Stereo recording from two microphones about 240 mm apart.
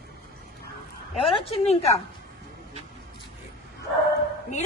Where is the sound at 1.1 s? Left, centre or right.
Left.